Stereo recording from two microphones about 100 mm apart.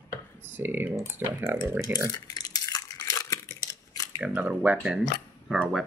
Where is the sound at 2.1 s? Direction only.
40° left (ahead or behind).